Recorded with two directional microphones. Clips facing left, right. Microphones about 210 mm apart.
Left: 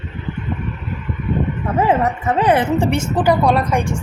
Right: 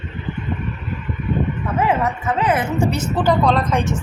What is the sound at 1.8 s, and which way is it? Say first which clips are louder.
Speech: left 3 dB; 35° left (ahead or behind).